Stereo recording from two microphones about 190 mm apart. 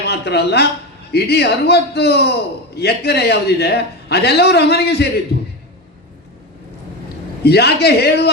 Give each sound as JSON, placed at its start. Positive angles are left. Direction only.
{"t": 0.0, "sound": "a man's voice", "side_deg": 60}
{"t": 7.4, "sound": "a man's voice", "side_deg": 60}